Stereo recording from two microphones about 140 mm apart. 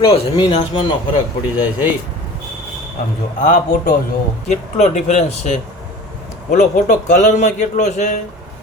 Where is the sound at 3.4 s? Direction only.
85° left.